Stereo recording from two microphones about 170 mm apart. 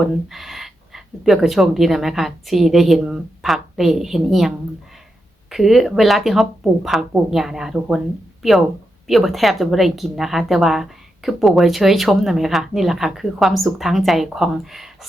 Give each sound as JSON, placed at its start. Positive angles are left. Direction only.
{"t": 0.0, "sound": "a woman's voice", "side_deg": 0}